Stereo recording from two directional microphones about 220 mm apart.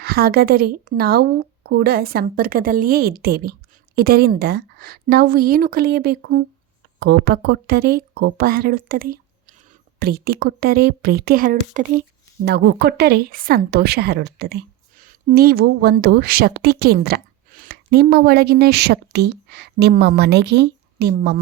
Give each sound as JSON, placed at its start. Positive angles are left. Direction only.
{"t": 0.0, "sound": "a woman's voice", "side_deg": -45}
{"t": 12.5, "sound": "a woman's voice", "side_deg": -45}